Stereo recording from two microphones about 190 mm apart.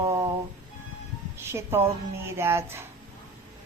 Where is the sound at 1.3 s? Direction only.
10° right (ahead or behind).